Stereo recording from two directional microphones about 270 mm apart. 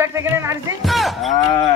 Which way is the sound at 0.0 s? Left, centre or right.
Centre.